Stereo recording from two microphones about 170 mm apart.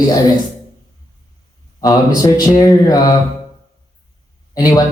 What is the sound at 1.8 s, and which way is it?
A man's voice, 20° left (ahead or behind).